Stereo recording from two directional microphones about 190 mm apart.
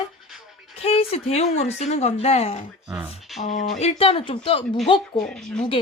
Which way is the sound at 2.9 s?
Centre (ahead or behind).